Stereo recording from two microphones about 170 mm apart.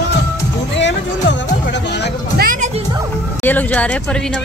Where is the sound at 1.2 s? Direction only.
90° left.